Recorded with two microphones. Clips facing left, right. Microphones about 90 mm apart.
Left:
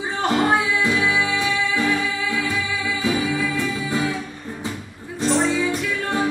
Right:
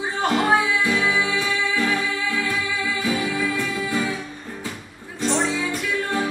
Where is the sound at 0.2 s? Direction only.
Centre (ahead or behind).